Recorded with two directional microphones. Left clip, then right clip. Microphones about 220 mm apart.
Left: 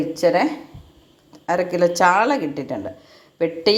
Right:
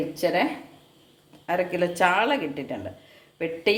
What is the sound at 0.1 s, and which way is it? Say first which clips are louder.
Speech: left 7 dB; 15° left (ahead or behind).